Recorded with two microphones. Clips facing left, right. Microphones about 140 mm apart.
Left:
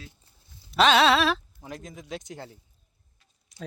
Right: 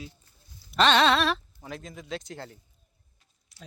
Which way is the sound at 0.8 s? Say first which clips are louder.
Left 2 dB; 5° left (ahead or behind).